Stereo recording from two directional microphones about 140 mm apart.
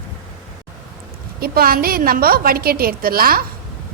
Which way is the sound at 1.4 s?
90° right.